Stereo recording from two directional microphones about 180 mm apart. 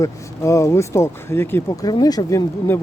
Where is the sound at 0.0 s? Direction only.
15° left (ahead or behind).